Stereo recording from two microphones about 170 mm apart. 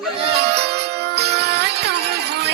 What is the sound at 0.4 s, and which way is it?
Music, 75° right (ahead or behind).